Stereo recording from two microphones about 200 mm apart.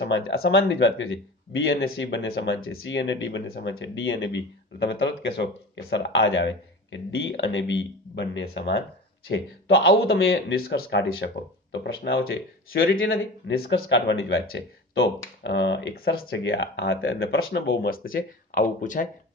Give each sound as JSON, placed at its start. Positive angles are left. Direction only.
{"t": 0.0, "sound": "speech", "side_deg": 55}
{"t": 0.6, "sound": "speech", "side_deg": 70}
{"t": 10.8, "sound": "speech", "side_deg": 60}
{"t": 13.8, "sound": "speech", "side_deg": 65}
{"t": 14.4, "sound": "speech", "side_deg": 55}
{"t": 17.5, "sound": "speech", "side_deg": 50}